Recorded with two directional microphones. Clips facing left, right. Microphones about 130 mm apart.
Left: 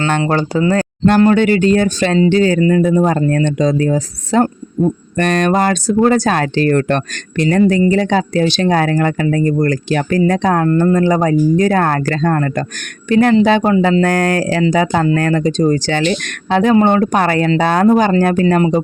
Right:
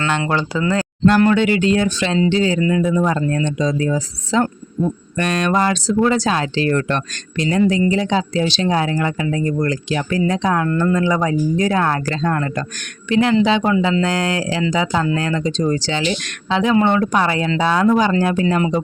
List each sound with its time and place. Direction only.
0.2 s speech: 40° left (ahead or behind)
14.0 s speech: 50° left (ahead or behind)